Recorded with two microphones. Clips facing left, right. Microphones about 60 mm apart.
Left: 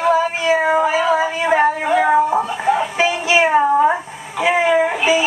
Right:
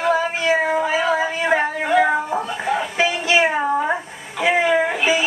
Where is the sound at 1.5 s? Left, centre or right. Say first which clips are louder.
Left 3 dB; left.